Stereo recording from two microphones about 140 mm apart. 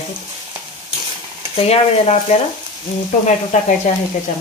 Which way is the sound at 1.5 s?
45° left (ahead or behind).